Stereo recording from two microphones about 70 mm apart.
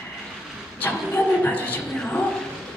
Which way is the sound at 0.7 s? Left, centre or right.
Left.